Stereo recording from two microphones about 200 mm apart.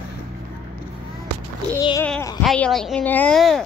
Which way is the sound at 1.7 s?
15° left (ahead or behind).